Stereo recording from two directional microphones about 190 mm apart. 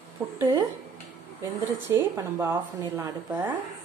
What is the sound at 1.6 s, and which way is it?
Speech, 15° right (ahead or behind).